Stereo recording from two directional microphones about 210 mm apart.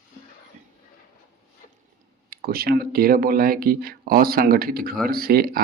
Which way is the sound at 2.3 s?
45° right (ahead or behind).